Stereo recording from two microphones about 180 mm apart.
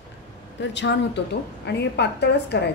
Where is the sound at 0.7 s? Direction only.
75° left (ahead or behind).